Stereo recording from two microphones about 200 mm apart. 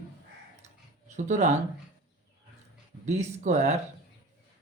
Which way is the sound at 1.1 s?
35° right (ahead or behind).